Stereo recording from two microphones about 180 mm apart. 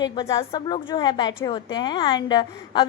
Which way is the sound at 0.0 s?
20° left (ahead or behind).